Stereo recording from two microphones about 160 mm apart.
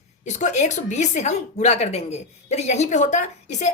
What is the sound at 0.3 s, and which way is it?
A woman's voice, 50° left (ahead or behind).